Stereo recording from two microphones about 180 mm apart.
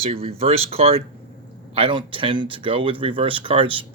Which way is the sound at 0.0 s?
35° right (ahead or behind).